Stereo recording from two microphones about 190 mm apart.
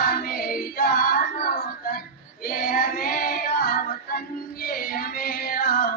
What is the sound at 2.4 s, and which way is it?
Child singing, 50° left (ahead or behind).